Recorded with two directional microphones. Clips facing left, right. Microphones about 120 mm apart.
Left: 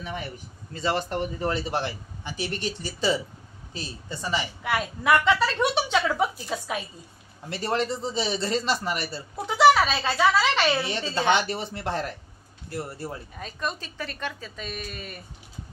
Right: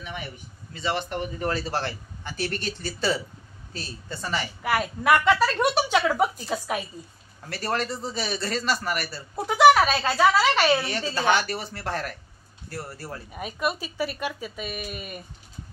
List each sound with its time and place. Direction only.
0.7 s speech: 40° left (ahead or behind)
1.4 s speech: 20° left (ahead or behind)
4.6 s a woman's voice: 5° right (ahead or behind)
7.4 s a man's voice: 20° left (ahead or behind)
9.3 s speech: centre (ahead or behind)
10.8 s a man's voice: 25° left (ahead or behind)
13.3 s speech: 15° right (ahead or behind)